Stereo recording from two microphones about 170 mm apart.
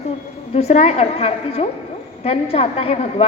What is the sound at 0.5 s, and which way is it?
A woman's voice, 40° left (ahead or behind).